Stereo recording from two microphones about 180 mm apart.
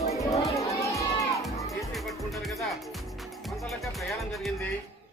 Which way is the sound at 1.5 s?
15° left (ahead or behind).